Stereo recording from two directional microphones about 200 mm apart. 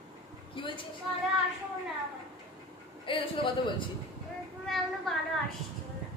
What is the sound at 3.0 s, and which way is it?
Speech, 25° left (ahead or behind).